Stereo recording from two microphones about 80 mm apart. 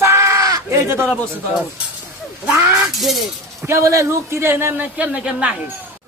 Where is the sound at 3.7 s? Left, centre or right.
Right; by 5.5 s centre.